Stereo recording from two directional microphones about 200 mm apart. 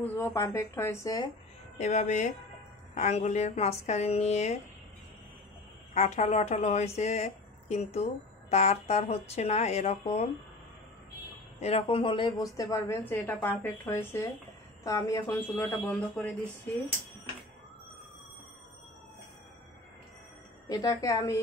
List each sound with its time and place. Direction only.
0.0 s a woman's voice: 10° left (ahead or behind)
1.8 s speech: 35° left (ahead or behind)
5.9 s speech: 35° left (ahead or behind)
11.6 s a woman's voice: 30° left (ahead or behind); by 16.3 s 5° left (ahead or behind)
20.6 s a woman's voice: 20° left (ahead or behind)